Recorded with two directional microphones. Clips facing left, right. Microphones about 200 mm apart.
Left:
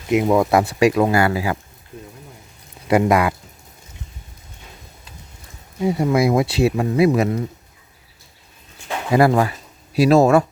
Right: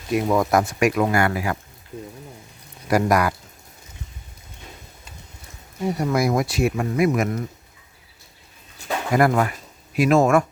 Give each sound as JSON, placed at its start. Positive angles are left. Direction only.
{"t": 0.1, "sound": "speech", "side_deg": 20}
{"t": 2.8, "sound": "speech", "side_deg": 25}
{"t": 5.8, "sound": "speech", "side_deg": 20}
{"t": 9.1, "sound": "speech", "side_deg": 30}